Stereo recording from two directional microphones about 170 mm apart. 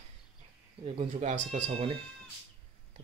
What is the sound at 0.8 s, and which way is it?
Speech, 40° right (ahead or behind).